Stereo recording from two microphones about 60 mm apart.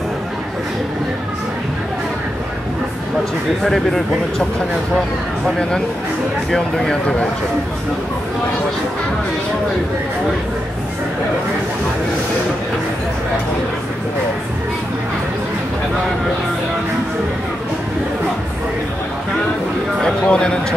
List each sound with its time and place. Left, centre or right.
3.6 s speech: centre
6.5 s speech: centre
20.0 s speech: centre